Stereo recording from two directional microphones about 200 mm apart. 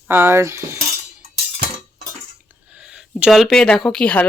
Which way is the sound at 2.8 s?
5° right (ahead or behind).